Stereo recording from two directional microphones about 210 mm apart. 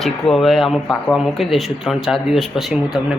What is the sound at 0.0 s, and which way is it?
Speech, centre (ahead or behind).